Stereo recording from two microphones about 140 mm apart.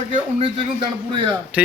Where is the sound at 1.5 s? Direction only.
10° right (ahead or behind).